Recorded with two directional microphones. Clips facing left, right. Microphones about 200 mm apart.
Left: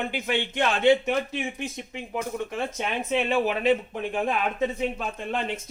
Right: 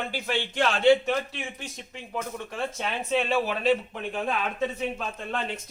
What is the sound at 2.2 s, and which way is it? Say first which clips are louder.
Speech: left 2 dB; 15° left (ahead or behind).